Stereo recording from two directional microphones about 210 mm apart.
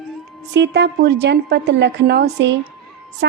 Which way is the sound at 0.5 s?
55° right (ahead or behind).